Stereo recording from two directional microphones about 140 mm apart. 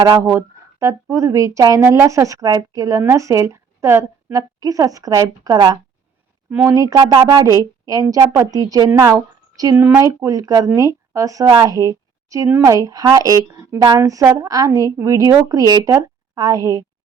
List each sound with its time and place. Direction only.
0.3 s a woman's voice: 20° right (ahead or behind)
12.5 s a woman's voice: 15° right (ahead or behind)
12.7 s a woman's voice: 25° right (ahead or behind)